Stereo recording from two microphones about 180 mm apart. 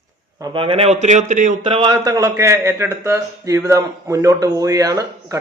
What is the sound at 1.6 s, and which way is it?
Speech, 25° right (ahead or behind).